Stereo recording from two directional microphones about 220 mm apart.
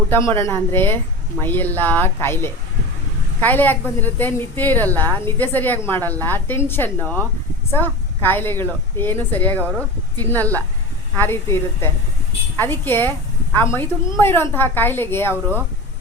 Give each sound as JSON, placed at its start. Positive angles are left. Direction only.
{"t": 0.1, "sound": "a woman's voice", "side_deg": 10}